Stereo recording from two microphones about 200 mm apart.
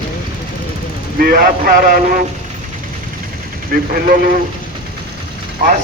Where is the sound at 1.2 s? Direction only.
45° right (ahead or behind).